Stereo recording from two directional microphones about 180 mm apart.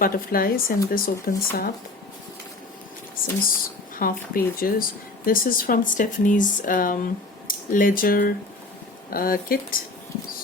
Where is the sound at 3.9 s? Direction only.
50° left (ahead or behind).